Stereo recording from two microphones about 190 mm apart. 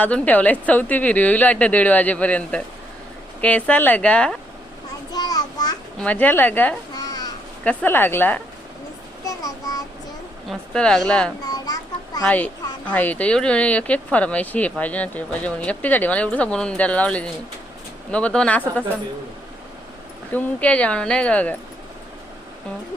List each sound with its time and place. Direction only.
0.0 s speech: 10° left (ahead or behind)
5.1 s a sound: 20° left (ahead or behind)
6.0 s speech: 10° left (ahead or behind)
6.9 s crow: 20° left (ahead or behind)
7.6 s speech: 10° left (ahead or behind)
9.2 s child singing: 20° left (ahead or behind)
10.5 s a woman's voice: 5° left (ahead or behind)
11.4 s a sound: 20° left (ahead or behind)
12.2 s speech: 5° left (ahead or behind)
20.3 s speech: 10° left (ahead or behind)